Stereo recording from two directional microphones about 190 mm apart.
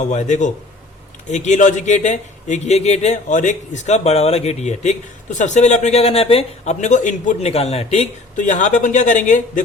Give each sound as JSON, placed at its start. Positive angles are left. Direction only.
{"t": 0.0, "sound": "speech", "side_deg": 40}